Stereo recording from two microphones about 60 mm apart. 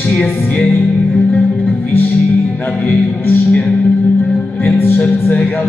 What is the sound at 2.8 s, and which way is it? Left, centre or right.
Music, left.